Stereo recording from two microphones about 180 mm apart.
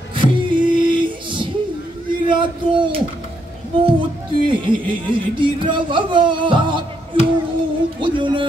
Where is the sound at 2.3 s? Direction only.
25° right (ahead or behind).